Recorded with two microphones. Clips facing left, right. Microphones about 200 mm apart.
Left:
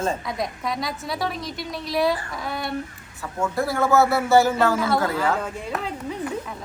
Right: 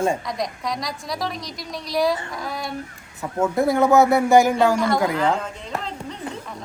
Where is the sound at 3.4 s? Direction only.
20° right (ahead or behind).